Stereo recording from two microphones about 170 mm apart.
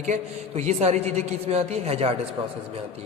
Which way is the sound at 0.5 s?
40° right (ahead or behind).